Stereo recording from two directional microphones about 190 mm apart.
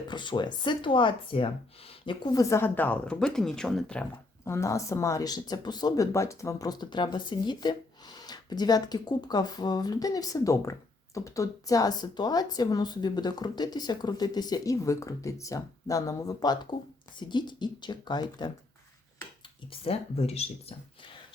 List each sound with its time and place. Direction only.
0.1 s speech: 25° left (ahead or behind); by 4.0 s 5° left (ahead or behind)
4.4 s speech: 15° left (ahead or behind)
19.7 s speech: 30° left (ahead or behind)